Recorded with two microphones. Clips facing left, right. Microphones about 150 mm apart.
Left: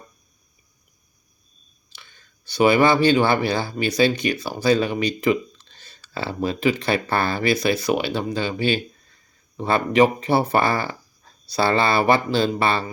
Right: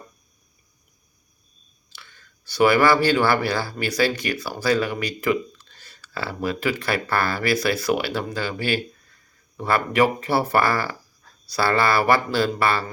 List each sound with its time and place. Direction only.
1.9 s speech: 20° left (ahead or behind)